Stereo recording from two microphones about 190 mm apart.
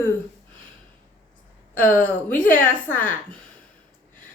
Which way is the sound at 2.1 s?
10° left (ahead or behind).